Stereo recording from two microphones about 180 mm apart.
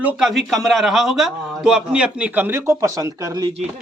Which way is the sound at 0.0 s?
5° right (ahead or behind).